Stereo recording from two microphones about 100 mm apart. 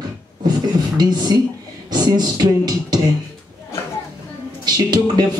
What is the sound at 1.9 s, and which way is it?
Speech, 45° right (ahead or behind).